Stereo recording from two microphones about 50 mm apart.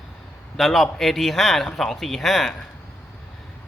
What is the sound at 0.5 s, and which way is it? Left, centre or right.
Speech, centre.